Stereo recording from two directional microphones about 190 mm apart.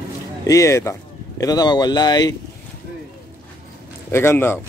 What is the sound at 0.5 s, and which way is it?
Speech, 15° left (ahead or behind).